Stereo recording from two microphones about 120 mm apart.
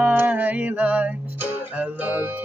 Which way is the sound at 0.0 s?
15° right (ahead or behind).